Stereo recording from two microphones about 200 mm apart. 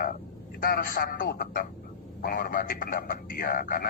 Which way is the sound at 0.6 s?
45° left (ahead or behind).